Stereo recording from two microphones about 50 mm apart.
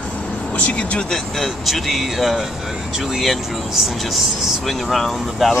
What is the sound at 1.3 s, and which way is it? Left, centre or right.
Speech, centre.